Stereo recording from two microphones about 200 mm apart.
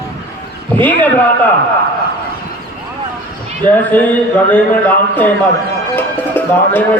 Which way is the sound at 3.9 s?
5° left (ahead or behind).